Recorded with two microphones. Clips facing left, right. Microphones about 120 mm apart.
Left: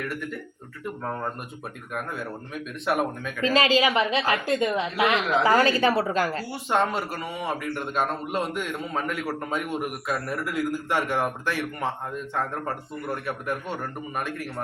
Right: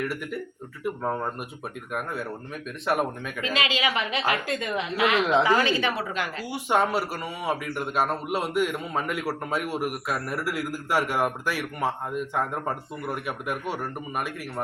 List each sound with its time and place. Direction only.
0.1 s a man's voice: 10° right (ahead or behind)
2.8 s speech: centre (ahead or behind)
3.4 s a woman's voice: 35° left (ahead or behind)
5.5 s a woman's voice: 40° left (ahead or behind)
6.5 s a man's voice: 10° right (ahead or behind)